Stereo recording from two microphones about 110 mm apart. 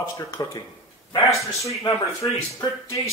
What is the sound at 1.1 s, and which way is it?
Speech, 30° left (ahead or behind).